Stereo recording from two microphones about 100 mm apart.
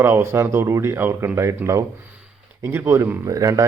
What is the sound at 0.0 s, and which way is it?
A man's voice, 25° right (ahead or behind).